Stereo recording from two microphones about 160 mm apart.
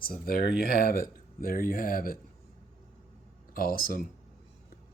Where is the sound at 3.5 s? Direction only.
65° left (ahead or behind).